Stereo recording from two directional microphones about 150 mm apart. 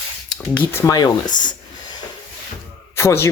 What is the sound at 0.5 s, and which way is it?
Speech, 20° left (ahead or behind).